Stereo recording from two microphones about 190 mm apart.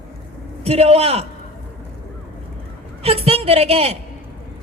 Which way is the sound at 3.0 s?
30° right (ahead or behind).